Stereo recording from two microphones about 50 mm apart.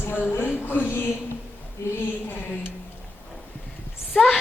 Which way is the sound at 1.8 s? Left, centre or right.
Left.